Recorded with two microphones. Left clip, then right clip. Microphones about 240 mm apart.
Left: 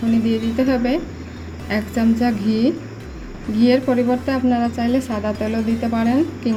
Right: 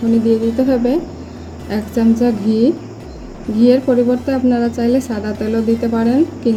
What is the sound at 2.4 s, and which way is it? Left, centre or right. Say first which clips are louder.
Speech: right 5 dB; left.